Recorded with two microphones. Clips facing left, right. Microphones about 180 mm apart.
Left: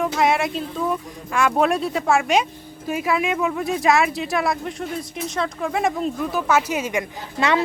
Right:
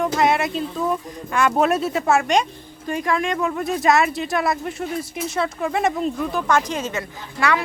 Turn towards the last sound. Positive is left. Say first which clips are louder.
# left 1 dB
turn(degrees=20)  # may be behind; listen again after turning